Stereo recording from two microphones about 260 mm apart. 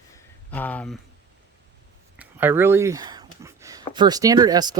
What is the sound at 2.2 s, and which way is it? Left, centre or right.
Speech, centre.